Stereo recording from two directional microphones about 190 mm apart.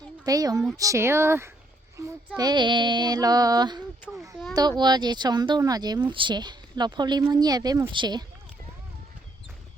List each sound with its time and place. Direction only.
0.3 s speech: 20° right (ahead or behind)
4.1 s a child's voice: centre (ahead or behind)
4.8 s speech: 20° right (ahead or behind)